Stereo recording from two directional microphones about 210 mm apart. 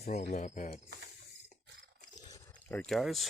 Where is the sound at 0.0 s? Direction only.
35° left (ahead or behind).